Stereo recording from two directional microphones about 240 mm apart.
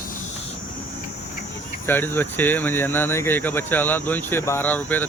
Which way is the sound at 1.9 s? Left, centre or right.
Centre.